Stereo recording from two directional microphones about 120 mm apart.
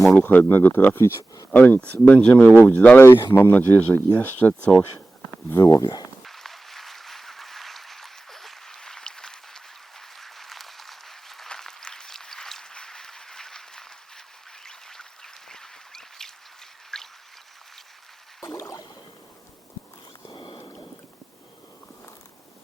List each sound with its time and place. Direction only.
0.2 s speech: 15° left (ahead or behind)
5.5 s speech: 30° left (ahead or behind)
6.2 s a sound: centre (ahead or behind)
10.2 s applause: centre (ahead or behind)
14.6 s duck: 5° left (ahead or behind)
16.9 s a sound: 5° left (ahead or behind)
20.2 s rowboat: 45° left (ahead or behind)